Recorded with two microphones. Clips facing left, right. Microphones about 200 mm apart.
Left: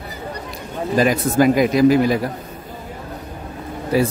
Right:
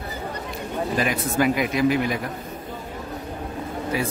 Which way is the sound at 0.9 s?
35° left (ahead or behind).